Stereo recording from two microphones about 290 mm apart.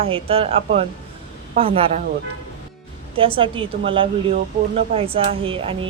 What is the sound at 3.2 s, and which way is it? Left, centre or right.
A woman's voice, centre.